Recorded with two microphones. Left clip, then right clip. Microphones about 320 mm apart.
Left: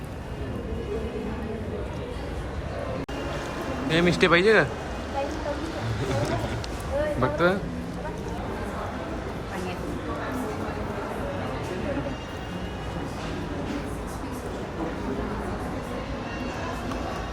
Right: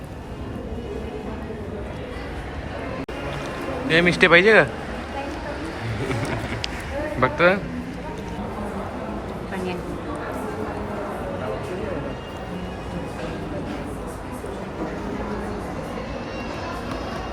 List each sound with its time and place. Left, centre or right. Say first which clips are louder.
3.9 s speech: right 6 dB; centre
7.2 s speech: right 8 dB; centre